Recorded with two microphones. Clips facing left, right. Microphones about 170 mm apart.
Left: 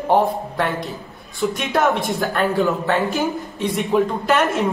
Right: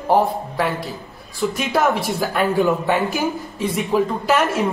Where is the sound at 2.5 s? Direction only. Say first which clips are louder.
Right 1 dB; 15° right (ahead or behind).